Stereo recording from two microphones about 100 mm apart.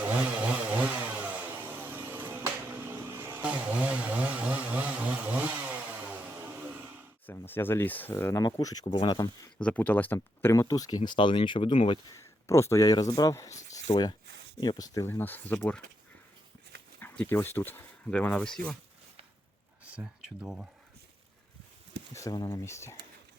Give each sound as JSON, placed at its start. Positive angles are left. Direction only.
{"t": 0.0, "sound": "chainsaw", "side_deg": -15}
{"t": 7.3, "sound": "speech", "side_deg": 20}
{"t": 8.4, "sound": "speech", "side_deg": 45}
{"t": 9.6, "sound": "speech", "side_deg": 15}
{"t": 10.5, "sound": "speech", "side_deg": 35}
{"t": 12.1, "sound": "speech", "side_deg": 30}
{"t": 17.0, "sound": "speech", "side_deg": 20}
{"t": 19.8, "sound": "speech", "side_deg": -15}
{"t": 22.1, "sound": "speech", "side_deg": 35}
{"t": 22.6, "sound": "speech", "side_deg": 30}